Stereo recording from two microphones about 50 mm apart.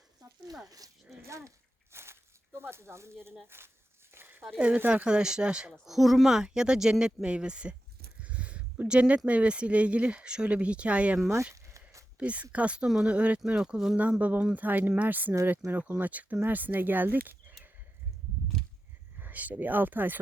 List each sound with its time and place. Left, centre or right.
1.1 s a sound: right
3.4 s speech: right
4.5 s speech: right
5.8 s speech: centre; by 11.2 s right
11.5 s a sound: right
12.2 s speech: right
13.6 s speech: centre
13.9 s speech: right
19.2 s speech: right